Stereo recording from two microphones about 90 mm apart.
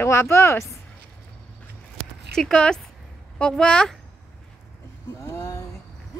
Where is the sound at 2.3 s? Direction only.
10° left (ahead or behind).